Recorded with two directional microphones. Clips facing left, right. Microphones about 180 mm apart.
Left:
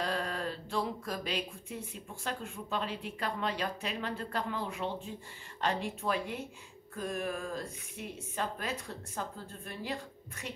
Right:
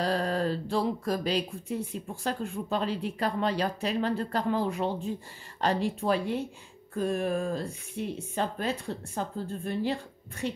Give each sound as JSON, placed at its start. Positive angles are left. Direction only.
{"t": 0.0, "sound": "speech", "side_deg": -35}